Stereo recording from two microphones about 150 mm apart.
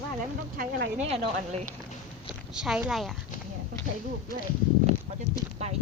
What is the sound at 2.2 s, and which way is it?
Speech, 5° right (ahead or behind).